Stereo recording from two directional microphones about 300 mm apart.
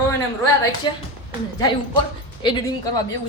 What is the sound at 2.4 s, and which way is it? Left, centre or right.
Speech, centre.